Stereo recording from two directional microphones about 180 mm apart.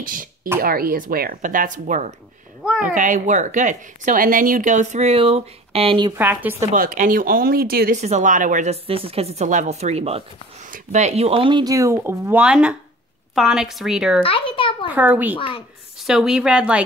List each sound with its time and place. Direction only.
0.0 s a sound: 50° right (ahead or behind)
0.6 s a woman's voice: 55° right (ahead or behind); by 6.1 s 30° right (ahead or behind)
6.1 s a woman's voice: 10° right (ahead or behind)
6.7 s a woman's voice: 50° right (ahead or behind)
8.0 s a woman's voice: 40° right (ahead or behind)
8.8 s a woman's voice: 30° right (ahead or behind); by 14.2 s 5° right (ahead or behind)
14.2 s a child's voice: 30° left (ahead or behind)
15.0 s a woman's voice: 10° right (ahead or behind)
15.3 s a child's voice: 30° left (ahead or behind)
16.0 s a woman's voice: centre (ahead or behind)